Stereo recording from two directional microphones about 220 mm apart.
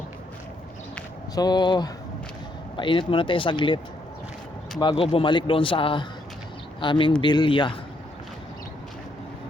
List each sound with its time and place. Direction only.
1.4 s speech: 20° left (ahead or behind)
4.8 s speech: 25° left (ahead or behind)